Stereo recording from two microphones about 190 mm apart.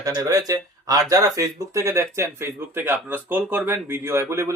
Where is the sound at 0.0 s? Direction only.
15° right (ahead or behind).